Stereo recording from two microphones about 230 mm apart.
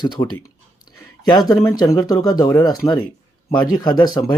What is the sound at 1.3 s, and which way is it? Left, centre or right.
Speech, centre.